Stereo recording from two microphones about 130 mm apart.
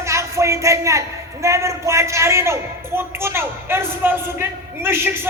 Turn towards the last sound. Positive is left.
turn(degrees=-20)  # may be behind; listen again after turning